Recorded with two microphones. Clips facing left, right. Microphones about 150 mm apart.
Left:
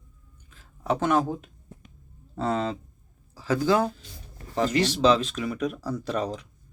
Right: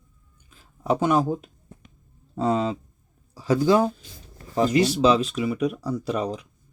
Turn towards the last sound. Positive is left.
turn(degrees=-10)  # may be behind; listen again after turning